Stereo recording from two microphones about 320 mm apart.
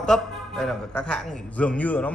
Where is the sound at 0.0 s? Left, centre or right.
Centre.